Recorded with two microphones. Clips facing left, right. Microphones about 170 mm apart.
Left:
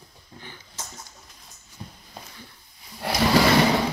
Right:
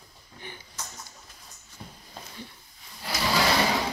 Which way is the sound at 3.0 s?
65° left (ahead or behind).